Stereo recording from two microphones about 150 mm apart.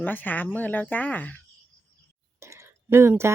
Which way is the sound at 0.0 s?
10° left (ahead or behind).